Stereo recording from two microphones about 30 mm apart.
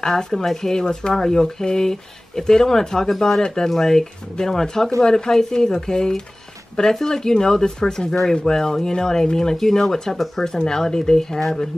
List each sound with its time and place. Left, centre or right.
0.0 s speech: centre
10.4 s speech: centre